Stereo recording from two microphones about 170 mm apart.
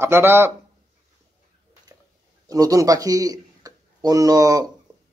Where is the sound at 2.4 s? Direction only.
20° right (ahead or behind).